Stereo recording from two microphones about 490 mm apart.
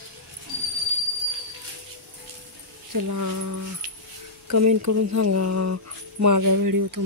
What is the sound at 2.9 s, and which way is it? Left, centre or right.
Speech, right.